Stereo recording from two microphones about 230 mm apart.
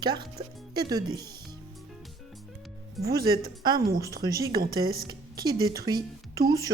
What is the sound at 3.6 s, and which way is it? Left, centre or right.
Speech, centre.